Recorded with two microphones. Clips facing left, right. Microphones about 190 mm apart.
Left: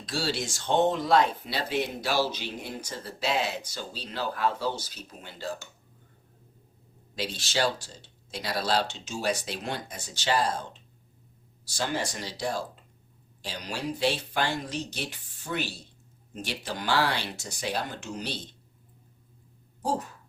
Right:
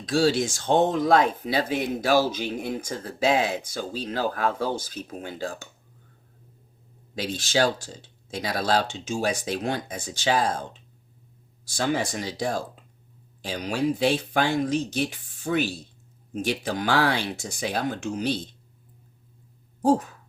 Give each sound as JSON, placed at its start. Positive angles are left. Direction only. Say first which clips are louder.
{"t": 0.0, "sound": "speech", "louder": "right 9 dB", "side_deg": -45}
{"t": 7.2, "sound": "speech", "louder": "right 5 dB", "side_deg": -45}